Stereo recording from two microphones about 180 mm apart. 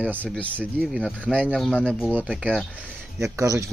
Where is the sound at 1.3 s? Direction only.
10° right (ahead or behind).